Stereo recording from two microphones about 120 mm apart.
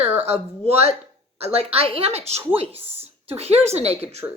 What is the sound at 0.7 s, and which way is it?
Speech, 60° right (ahead or behind).